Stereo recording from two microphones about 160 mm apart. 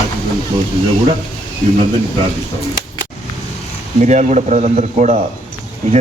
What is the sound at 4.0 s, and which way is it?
Speech, 45° right (ahead or behind).